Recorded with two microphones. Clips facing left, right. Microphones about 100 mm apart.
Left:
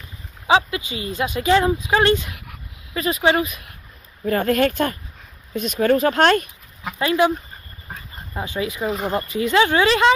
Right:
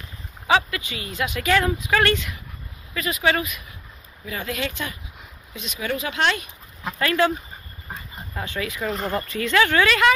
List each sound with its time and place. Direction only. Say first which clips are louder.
0.5 s speech: left 3 dB; 20° left (ahead or behind)
4.2 s speech: left 11 dB; 50° left (ahead or behind)
7.0 s speech: left 3 dB; 20° left (ahead or behind)
8.4 s speech: left 4 dB; 20° left (ahead or behind)
8.8 s speech: left 2 dB; 5° left (ahead or behind)
9.3 s speech: left 3 dB; 20° left (ahead or behind)